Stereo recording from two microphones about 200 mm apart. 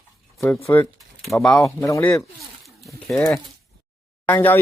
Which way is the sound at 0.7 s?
15° left (ahead or behind).